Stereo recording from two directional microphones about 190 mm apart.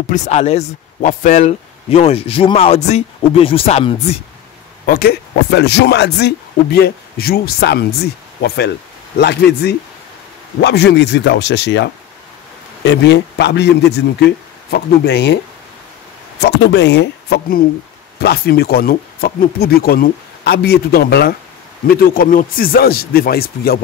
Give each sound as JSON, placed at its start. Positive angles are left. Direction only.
{"t": 0.1, "sound": "speech", "side_deg": 35}
{"t": 4.8, "sound": "speech", "side_deg": 55}
{"t": 16.3, "sound": "speech", "side_deg": 65}